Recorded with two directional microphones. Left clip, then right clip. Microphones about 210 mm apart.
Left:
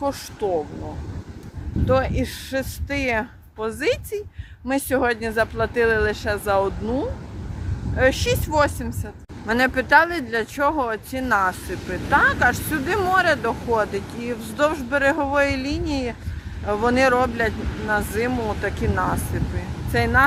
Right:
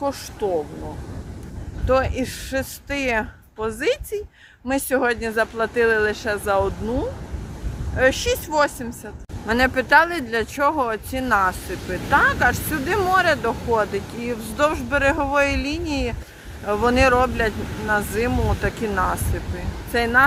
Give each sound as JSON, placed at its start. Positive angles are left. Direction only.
{"t": 0.0, "sound": "speech", "side_deg": 0}
{"t": 1.9, "sound": "speech", "side_deg": -5}
{"t": 9.5, "sound": "speech", "side_deg": -10}
{"t": 17.5, "sound": "speech", "side_deg": -55}
{"t": 17.8, "sound": "speech", "side_deg": -10}